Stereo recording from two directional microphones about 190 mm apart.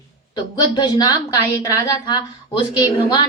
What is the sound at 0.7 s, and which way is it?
A woman's voice, 20° left (ahead or behind).